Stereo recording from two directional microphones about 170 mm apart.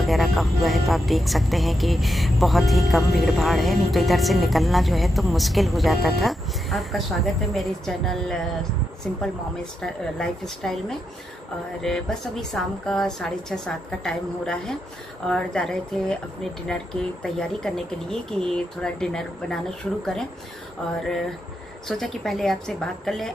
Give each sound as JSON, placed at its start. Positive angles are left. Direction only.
{"t": 0.0, "sound": "speech", "side_deg": 0}
{"t": 21.8, "sound": "speech", "side_deg": 0}